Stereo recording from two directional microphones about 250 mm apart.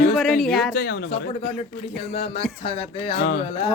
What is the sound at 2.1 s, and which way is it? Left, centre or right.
Speech, left.